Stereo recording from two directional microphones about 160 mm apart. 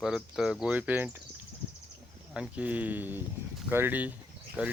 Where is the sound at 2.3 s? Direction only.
5° right (ahead or behind).